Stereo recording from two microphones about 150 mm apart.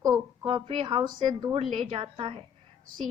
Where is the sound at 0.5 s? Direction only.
35° right (ahead or behind).